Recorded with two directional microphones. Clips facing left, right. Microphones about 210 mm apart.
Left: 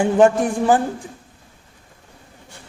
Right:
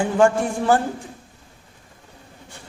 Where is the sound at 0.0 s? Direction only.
20° left (ahead or behind).